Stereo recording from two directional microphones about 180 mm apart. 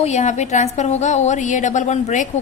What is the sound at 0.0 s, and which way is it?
A woman's voice, 40° left (ahead or behind).